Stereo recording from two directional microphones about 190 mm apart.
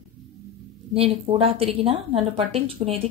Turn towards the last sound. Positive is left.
turn(degrees=-30)  # may be behind; listen again after turning